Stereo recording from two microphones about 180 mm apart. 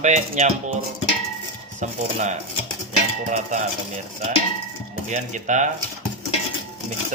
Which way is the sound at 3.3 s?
40° right (ahead or behind).